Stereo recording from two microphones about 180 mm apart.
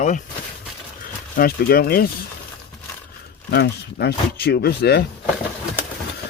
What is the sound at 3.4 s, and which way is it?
Speech, 65° left (ahead or behind).